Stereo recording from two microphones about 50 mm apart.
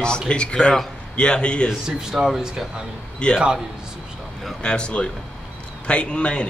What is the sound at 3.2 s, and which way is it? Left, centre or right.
Speech, centre.